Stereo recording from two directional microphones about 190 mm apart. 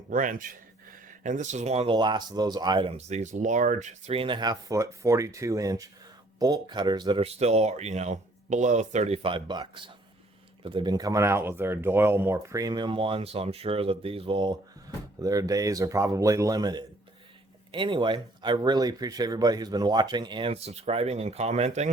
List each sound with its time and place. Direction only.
0.1 s speech: 45° right (ahead or behind); by 2.9 s 25° right (ahead or behind)
3.1 s speech: 40° right (ahead or behind)